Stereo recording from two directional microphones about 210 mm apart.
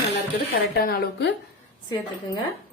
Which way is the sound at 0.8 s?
45° left (ahead or behind).